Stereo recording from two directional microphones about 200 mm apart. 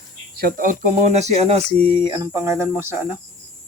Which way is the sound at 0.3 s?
45° right (ahead or behind).